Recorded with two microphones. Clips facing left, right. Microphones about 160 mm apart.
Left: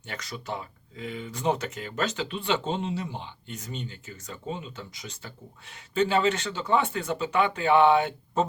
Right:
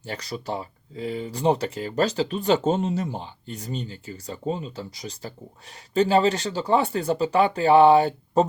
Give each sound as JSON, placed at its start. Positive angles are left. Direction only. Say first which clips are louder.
{"t": 0.0, "sound": "speech", "louder": "right 6 dB", "side_deg": -35}